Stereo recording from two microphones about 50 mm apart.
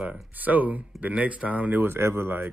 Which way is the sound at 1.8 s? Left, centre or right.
Right.